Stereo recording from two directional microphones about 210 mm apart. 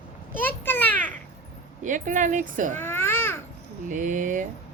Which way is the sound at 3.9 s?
40° right (ahead or behind).